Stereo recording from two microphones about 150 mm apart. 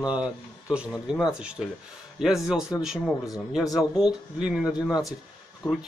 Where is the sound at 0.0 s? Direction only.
5° right (ahead or behind).